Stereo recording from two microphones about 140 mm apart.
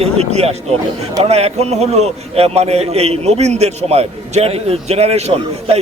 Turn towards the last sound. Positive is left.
turn(degrees=-50)  # may be behind; listen again after turning